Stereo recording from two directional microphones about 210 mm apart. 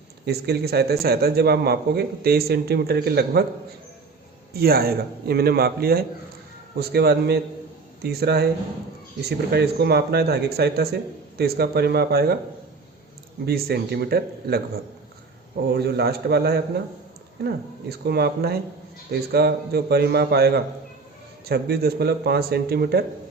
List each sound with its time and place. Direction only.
0.3 s speech: 50° right (ahead or behind)
4.5 s speech: 45° right (ahead or behind)
9.5 s speech: 50° right (ahead or behind)
13.4 s speech: 50° right (ahead or behind)
15.7 s speech: 50° right (ahead or behind)